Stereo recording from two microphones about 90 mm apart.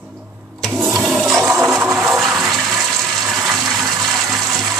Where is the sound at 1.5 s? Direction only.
30° right (ahead or behind).